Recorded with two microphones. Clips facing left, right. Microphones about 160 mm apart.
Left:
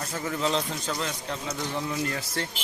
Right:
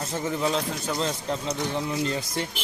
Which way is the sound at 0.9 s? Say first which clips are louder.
Right 5 dB; 30° right (ahead or behind).